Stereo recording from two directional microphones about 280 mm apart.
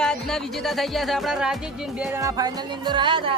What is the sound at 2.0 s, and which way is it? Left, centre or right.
Music, centre.